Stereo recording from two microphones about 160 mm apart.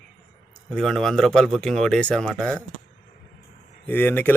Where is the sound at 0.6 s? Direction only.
5° left (ahead or behind).